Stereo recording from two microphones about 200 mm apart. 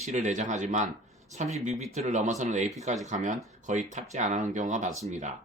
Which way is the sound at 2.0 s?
35° right (ahead or behind).